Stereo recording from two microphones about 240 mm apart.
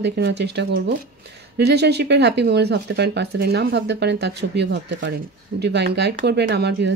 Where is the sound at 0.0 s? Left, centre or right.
Right.